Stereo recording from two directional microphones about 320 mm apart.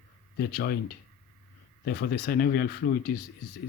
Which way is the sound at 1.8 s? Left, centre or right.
Left.